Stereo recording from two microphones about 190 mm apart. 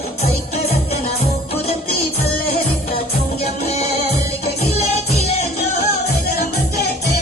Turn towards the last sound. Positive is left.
turn(degrees=35)  # may be behind; listen again after turning